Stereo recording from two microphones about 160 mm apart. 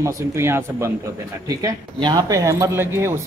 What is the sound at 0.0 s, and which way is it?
Speech, 15° right (ahead or behind).